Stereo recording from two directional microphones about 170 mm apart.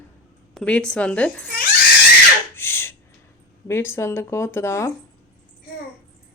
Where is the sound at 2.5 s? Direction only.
15° left (ahead or behind).